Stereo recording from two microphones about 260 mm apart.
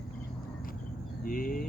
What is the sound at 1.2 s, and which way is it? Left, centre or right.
Speech, left.